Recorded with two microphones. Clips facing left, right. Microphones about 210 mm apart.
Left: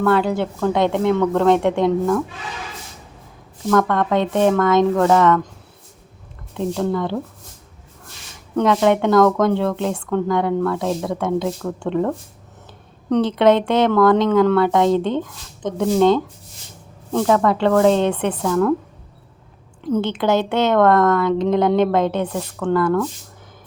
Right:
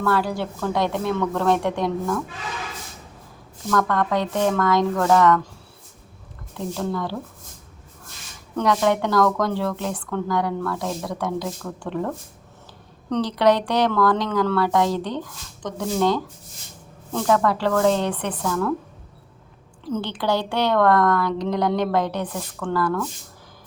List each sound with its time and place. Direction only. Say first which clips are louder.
0.0 s speech: left 5 dB; 20° left (ahead or behind)
3.7 s speech: left 4 dB; 20° left (ahead or behind)
6.7 s speech: left 4 dB; 20° left (ahead or behind)
8.5 s speech: left 4 dB; 20° left (ahead or behind)
19.8 s speech: left 6 dB; 20° left (ahead or behind)